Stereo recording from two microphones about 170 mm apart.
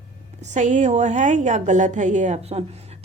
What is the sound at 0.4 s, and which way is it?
A woman's voice, 45° right (ahead or behind).